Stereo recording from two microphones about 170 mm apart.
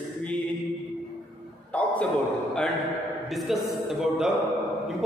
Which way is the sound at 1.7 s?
10° left (ahead or behind).